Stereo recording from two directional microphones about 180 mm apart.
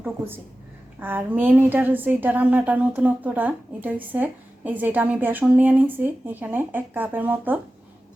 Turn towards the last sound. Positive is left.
turn(degrees=-10)  # may be behind; listen again after turning